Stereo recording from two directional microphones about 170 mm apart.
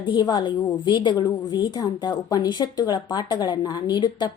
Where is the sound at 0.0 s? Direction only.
25° left (ahead or behind).